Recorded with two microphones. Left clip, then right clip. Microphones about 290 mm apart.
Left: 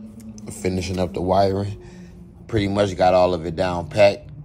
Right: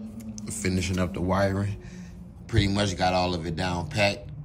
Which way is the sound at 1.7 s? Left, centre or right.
Centre.